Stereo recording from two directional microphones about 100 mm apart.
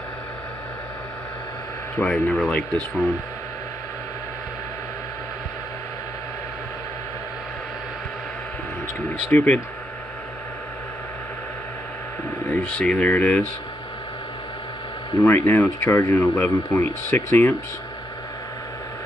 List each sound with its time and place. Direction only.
2.0 s speech: 15° left (ahead or behind)
9.3 s speech: 15° left (ahead or behind)
12.4 s speech: 15° left (ahead or behind)
15.2 s speech: 20° left (ahead or behind)